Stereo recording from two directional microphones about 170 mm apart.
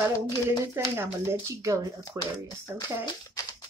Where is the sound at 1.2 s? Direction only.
20° right (ahead or behind).